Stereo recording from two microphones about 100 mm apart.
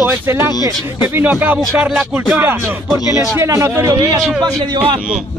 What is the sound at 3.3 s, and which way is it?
Speech, 30° right (ahead or behind).